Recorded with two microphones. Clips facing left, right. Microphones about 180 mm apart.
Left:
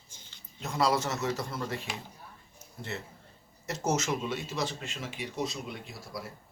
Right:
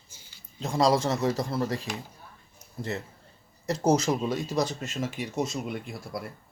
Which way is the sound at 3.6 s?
35° right (ahead or behind).